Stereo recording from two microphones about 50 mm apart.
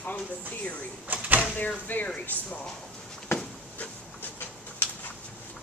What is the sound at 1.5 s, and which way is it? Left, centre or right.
Speech, left.